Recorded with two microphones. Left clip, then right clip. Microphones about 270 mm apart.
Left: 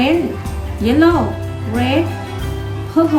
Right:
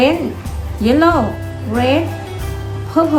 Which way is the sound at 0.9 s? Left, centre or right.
Centre.